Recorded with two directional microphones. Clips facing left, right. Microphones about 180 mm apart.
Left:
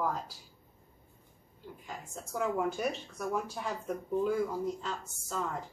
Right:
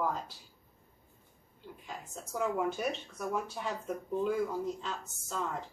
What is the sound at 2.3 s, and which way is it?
A woman's voice, centre (ahead or behind).